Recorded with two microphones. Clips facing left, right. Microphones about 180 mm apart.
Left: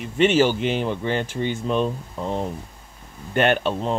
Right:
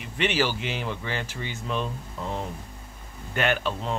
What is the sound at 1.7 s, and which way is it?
Speech, 25° left (ahead or behind).